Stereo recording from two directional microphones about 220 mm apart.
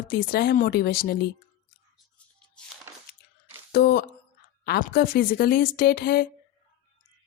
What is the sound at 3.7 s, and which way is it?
Speech, 45° left (ahead or behind).